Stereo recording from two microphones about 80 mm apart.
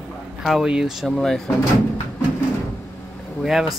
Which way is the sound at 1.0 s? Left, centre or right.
Centre.